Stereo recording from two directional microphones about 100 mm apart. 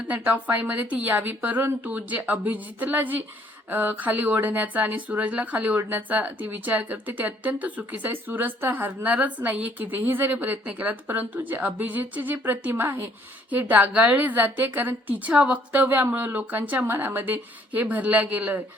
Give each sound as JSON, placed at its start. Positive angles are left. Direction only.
{"t": 0.1, "sound": "speech", "side_deg": -15}